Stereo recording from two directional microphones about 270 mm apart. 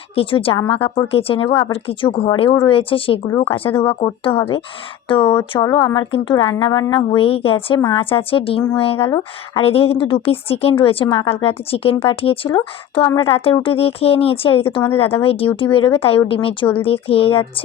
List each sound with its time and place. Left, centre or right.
0.2 s speech: centre
3.2 s speech: centre
3.5 s speech: centre